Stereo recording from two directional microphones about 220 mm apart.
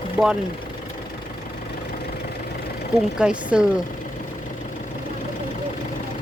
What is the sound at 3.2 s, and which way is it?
Speech, 5° right (ahead or behind).